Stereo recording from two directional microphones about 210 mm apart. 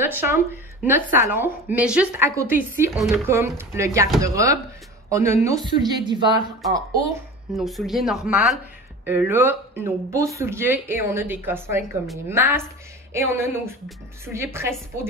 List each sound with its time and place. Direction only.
0.0 s a woman's voice: 10° right (ahead or behind)
7.5 s speech: centre (ahead or behind)